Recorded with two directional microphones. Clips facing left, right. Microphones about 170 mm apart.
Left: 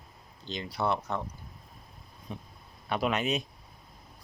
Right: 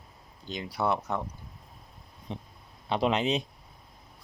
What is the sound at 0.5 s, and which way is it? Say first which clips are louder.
Speech: right 1 dB; 10° right (ahead or behind).